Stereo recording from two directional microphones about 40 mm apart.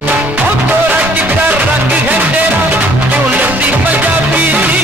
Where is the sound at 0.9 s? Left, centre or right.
Right.